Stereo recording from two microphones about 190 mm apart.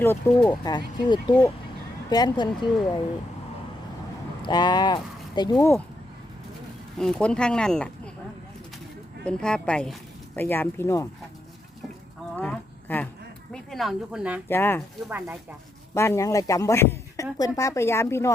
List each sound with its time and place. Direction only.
0.0 s speech: 10° left (ahead or behind)
4.4 s speech: 20° left (ahead or behind)
7.0 s speech: 5° left (ahead or behind)
9.2 s speech: 5° left (ahead or behind)
12.4 s livestock: 10° left (ahead or behind)
13.5 s speech: centre (ahead or behind)
14.4 s speech: 10° left (ahead or behind)
16.0 s speech: 15° left (ahead or behind)